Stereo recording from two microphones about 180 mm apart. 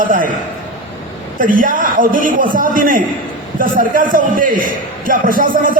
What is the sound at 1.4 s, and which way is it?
A man's voice, 50° right (ahead or behind).